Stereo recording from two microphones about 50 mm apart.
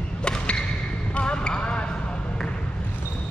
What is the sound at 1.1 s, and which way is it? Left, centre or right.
Basketball bounce, centre.